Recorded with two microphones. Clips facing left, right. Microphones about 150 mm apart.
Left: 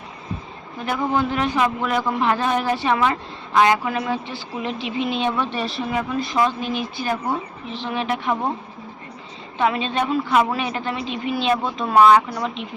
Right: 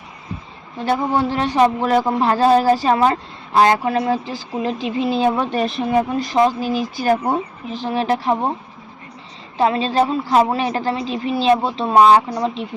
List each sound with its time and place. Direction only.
0.8 s speech: 30° right (ahead or behind)
9.6 s speech: 35° right (ahead or behind)